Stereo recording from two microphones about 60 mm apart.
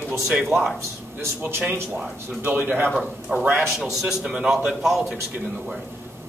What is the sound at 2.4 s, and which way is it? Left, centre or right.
Speech, right.